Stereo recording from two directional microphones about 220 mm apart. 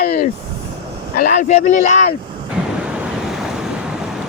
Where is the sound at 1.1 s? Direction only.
40° left (ahead or behind).